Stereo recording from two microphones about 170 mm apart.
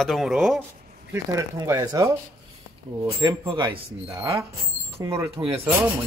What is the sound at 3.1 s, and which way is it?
Speech, 30° right (ahead or behind).